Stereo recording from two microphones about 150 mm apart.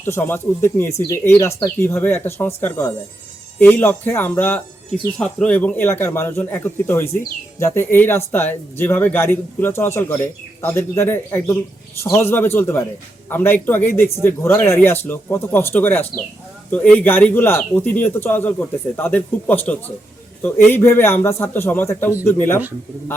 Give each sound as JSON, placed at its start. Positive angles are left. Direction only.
{"t": 0.0, "sound": "speech", "side_deg": 15}